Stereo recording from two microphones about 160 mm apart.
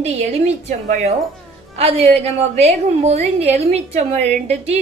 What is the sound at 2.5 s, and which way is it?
A woman's voice, 40° right (ahead or behind).